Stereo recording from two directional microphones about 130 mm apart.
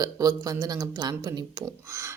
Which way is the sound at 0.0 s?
30° right (ahead or behind).